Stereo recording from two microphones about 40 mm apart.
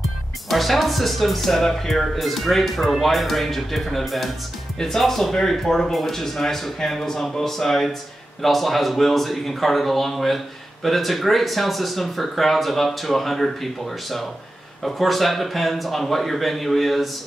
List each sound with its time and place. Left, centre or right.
0.0 s speech: centre